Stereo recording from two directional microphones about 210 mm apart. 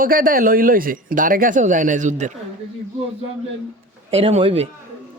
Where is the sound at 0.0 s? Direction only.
45° right (ahead or behind).